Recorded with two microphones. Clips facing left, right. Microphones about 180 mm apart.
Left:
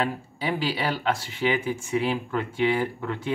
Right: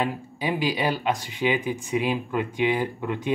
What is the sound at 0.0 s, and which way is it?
Speech, 15° right (ahead or behind).